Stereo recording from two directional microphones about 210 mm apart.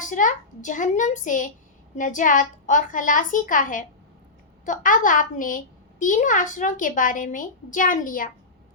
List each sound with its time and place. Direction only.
0.0 s a child's voice: 35° left (ahead or behind)